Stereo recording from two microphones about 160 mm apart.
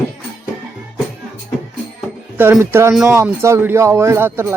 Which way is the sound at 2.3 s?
15° right (ahead or behind).